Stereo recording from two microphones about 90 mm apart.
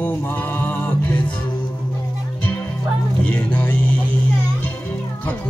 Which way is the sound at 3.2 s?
15° left (ahead or behind).